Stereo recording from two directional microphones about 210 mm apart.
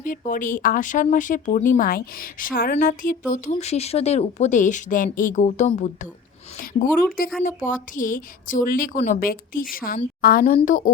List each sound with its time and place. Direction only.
0.0 s speech: 40° left (ahead or behind)
7.4 s a woman's voice: 40° left (ahead or behind)